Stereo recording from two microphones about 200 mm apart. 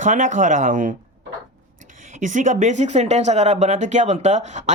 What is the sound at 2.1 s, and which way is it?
A woman's voice, 40° right (ahead or behind).